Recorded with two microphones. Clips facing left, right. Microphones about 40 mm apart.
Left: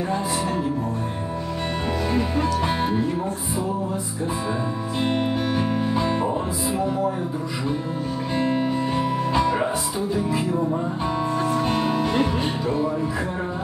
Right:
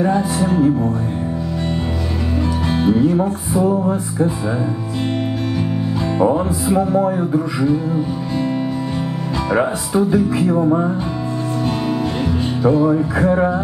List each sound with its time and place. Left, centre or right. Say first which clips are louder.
8.4 s music: right 2 dB; left
10.1 s music: right 7 dB; right
12.6 s music: right 13 dB; right